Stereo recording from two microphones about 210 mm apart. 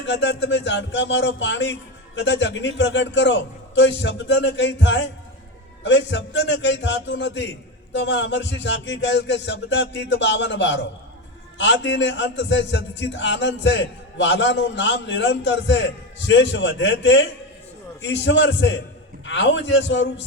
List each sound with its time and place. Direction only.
0.0 s a man's voice: 60° left (ahead or behind)